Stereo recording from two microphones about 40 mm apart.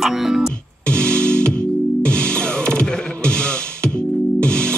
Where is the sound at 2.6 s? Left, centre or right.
Left.